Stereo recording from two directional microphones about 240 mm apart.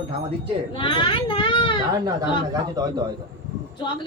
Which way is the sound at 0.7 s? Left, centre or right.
Left.